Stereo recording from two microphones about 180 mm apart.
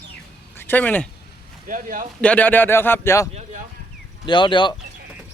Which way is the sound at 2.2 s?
10° left (ahead or behind).